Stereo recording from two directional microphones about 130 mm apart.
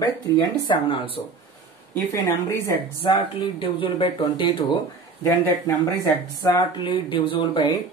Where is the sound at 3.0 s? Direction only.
40° left (ahead or behind).